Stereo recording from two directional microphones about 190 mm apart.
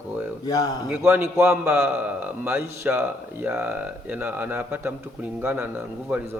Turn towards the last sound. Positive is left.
turn(degrees=-10)  # may be behind; listen again after turning